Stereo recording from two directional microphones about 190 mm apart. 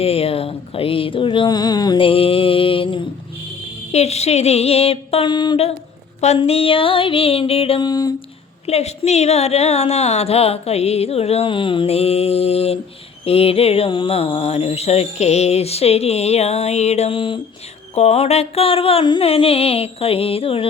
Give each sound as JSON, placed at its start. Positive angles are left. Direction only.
{"t": 0.0, "sound": "speech", "side_deg": 30}
{"t": 6.1, "sound": "music", "side_deg": 35}
{"t": 8.6, "sound": "speech", "side_deg": 35}